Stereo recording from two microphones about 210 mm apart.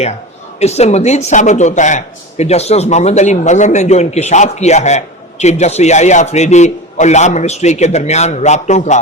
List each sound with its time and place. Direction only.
0.6 s a man's voice: 30° left (ahead or behind)